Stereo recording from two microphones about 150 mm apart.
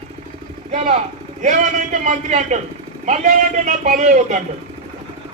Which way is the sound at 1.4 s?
55° right (ahead or behind).